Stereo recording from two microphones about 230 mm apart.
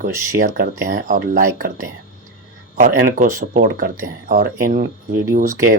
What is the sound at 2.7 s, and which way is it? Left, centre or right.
Speech, right.